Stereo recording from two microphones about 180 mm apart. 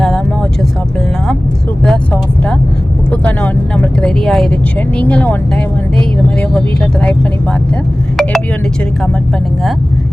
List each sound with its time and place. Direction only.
3.1 s vehicle: 10° left (ahead or behind)
4.9 s speech: 5° left (ahead or behind)